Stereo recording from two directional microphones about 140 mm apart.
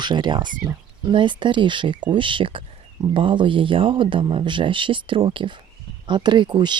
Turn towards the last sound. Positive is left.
turn(degrees=-35)  # may be behind; listen again after turning